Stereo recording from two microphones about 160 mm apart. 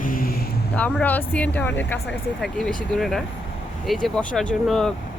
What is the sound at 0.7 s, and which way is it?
Speech, 10° left (ahead or behind).